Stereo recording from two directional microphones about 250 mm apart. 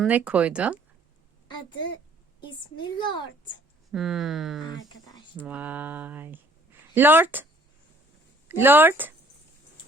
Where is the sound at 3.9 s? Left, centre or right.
Centre.